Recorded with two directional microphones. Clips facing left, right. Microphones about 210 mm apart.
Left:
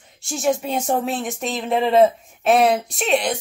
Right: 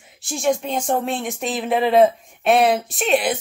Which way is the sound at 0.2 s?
Centre (ahead or behind).